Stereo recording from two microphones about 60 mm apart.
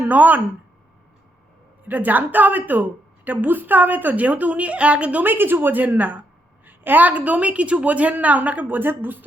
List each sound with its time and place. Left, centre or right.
0.0 s speech: right
1.8 s a woman's voice: right
5.2 s a woman's voice: right